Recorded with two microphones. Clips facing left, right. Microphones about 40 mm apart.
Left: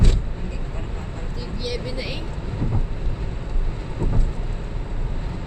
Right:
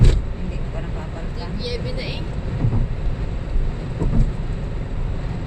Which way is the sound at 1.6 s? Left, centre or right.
Centre.